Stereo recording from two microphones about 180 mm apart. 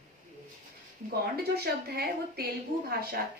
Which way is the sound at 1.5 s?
60° right (ahead or behind).